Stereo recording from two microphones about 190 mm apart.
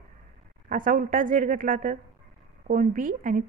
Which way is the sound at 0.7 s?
45° right (ahead or behind).